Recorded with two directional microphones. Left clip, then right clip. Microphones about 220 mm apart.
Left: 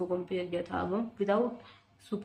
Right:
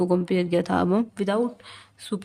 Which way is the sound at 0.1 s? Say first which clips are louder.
Right 10 dB; 60° right (ahead or behind).